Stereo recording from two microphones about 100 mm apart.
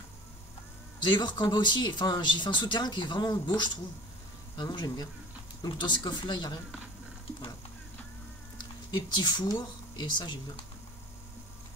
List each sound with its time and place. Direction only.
1.0 s speech: 45° left (ahead or behind)
8.9 s speech: 50° left (ahead or behind)